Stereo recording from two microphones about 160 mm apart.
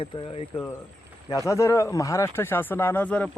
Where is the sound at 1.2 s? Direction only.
20° left (ahead or behind).